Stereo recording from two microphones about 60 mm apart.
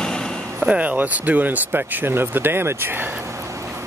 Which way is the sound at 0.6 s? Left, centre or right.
Right.